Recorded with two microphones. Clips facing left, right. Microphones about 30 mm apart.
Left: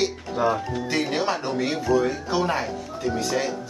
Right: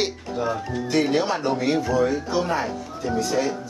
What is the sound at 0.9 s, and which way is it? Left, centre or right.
Speech, centre.